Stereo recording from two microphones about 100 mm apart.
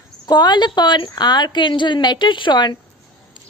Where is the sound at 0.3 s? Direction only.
45° left (ahead or behind).